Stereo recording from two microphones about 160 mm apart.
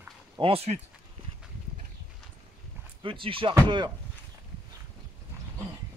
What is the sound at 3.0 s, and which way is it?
Speech, 35° right (ahead or behind).